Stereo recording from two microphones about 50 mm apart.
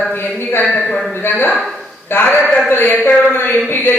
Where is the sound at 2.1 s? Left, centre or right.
Left.